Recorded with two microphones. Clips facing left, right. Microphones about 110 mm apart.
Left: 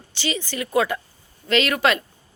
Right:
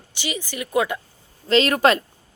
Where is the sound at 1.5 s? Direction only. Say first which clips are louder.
Right 3 dB; 35° right (ahead or behind).